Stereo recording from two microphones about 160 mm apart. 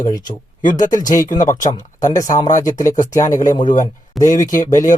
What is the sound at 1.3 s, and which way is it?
Speech, 20° left (ahead or behind).